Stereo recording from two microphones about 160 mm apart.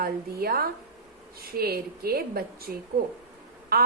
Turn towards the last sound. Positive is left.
turn(degrees=-70)  # may be behind; listen again after turning